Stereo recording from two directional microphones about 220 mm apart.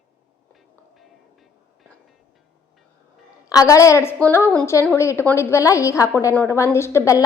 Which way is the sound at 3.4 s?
15° left (ahead or behind).